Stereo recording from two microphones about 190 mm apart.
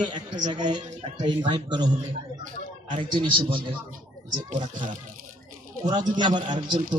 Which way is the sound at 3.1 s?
25° right (ahead or behind).